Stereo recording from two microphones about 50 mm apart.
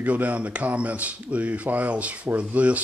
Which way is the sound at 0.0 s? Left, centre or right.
Right.